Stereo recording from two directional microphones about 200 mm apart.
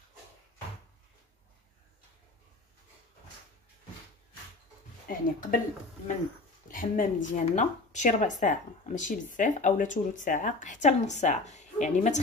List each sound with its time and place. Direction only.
5.0 s speech: 40° left (ahead or behind)
6.7 s a woman's voice: 40° left (ahead or behind)